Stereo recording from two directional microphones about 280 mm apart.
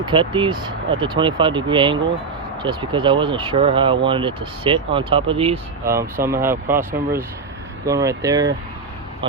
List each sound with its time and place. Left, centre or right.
0.0 s speech: centre